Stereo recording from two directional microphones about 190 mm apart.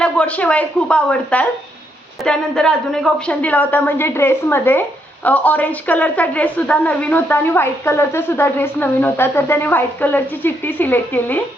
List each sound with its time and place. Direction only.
0.0 s a woman's voice: 5° left (ahead or behind)